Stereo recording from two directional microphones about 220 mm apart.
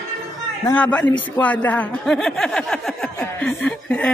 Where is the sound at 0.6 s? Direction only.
5° left (ahead or behind).